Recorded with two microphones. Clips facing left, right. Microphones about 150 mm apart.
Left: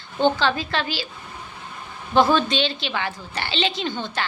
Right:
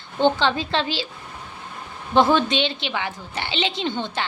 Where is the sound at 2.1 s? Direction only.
20° right (ahead or behind).